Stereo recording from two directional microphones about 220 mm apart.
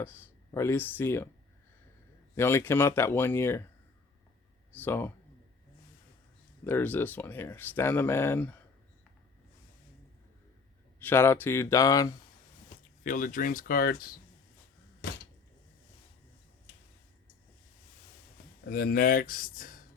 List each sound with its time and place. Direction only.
0.0 s speech: 10° left (ahead or behind)
2.3 s speech: 10° left (ahead or behind)
4.8 s speech: 10° left (ahead or behind)
6.7 s speech: 10° left (ahead or behind)
11.0 s speech: 10° left (ahead or behind)
13.1 s speech: 35° left (ahead or behind)
18.7 s speech: 45° left (ahead or behind)